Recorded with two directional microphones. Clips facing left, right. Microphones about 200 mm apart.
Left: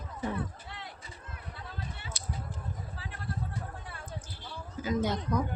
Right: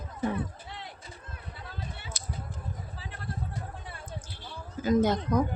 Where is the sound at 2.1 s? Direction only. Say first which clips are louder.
Left 1 dB; 45° right (ahead or behind).